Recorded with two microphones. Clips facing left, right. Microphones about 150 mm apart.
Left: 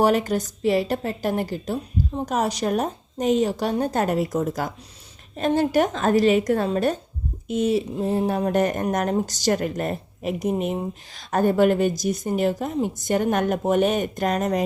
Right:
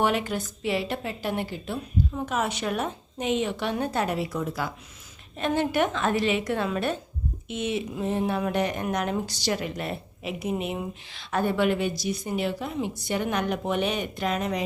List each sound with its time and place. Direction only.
0.0 s a woman's voice: 40° left (ahead or behind)